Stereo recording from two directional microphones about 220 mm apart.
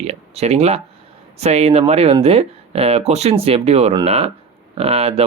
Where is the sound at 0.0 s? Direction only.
30° right (ahead or behind).